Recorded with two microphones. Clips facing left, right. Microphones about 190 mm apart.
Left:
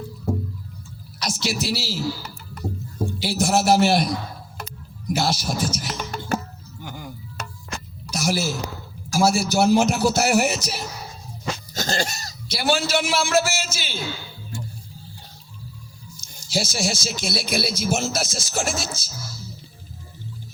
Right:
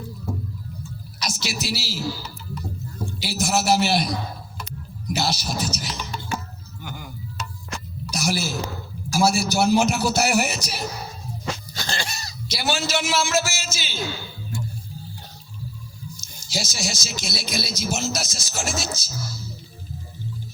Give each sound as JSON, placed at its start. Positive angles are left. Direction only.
{"t": 1.2, "sound": "a sound", "side_deg": 55}
{"t": 3.7, "sound": "a man's voice", "side_deg": 50}
{"t": 7.4, "sound": "music", "side_deg": 60}
{"t": 8.2, "sound": "a man's voice", "side_deg": 45}
{"t": 10.4, "sound": "speech", "side_deg": 25}
{"t": 11.7, "sound": "speech", "side_deg": 45}
{"t": 16.3, "sound": "speech", "side_deg": 50}